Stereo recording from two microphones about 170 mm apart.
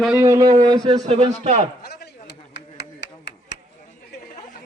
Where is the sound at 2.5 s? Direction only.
90° left.